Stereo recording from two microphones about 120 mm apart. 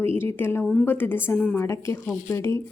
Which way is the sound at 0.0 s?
20° left (ahead or behind).